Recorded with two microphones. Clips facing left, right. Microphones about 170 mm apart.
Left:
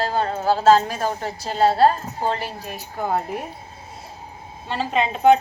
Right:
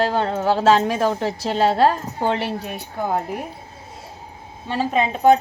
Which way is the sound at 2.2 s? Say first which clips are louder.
Right 4 dB; 65° right (ahead or behind).